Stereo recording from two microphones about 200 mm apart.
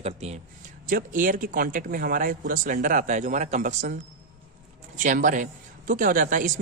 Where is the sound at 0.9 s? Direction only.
45° right (ahead or behind).